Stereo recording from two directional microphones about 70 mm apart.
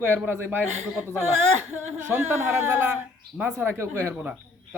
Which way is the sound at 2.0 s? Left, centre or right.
Right.